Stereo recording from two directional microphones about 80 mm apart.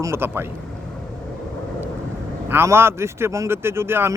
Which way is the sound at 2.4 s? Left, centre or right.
Right.